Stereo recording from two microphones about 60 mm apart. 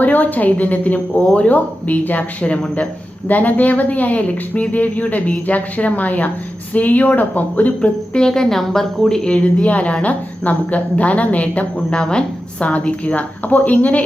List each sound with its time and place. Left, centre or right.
0.0 s a woman's voice: left
8.1 s a woman's voice: centre